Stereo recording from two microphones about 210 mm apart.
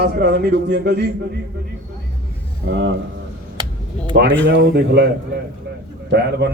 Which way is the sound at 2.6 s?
60° right (ahead or behind).